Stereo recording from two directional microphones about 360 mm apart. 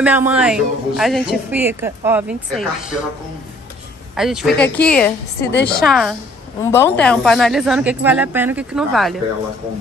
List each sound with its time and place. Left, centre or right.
0.0 s a woman's voice: centre
4.2 s a woman's voice: centre
5.5 s a woman's voice: left
5.8 s a woman's voice: centre